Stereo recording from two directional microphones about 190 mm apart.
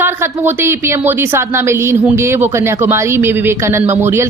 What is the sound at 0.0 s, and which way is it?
A woman's voice, 10° right (ahead or behind).